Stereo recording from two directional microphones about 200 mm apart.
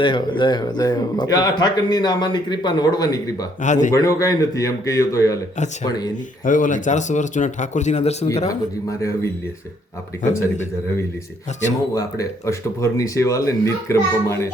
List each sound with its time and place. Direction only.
0.0 s a man's voice: 25° left (ahead or behind)
3.6 s speech: 40° left (ahead or behind)
3.9 s speech: 15° left (ahead or behind)
6.4 s speech: 40° left (ahead or behind)
8.4 s speech: 15° left (ahead or behind)
11.9 s speech: 15° left (ahead or behind)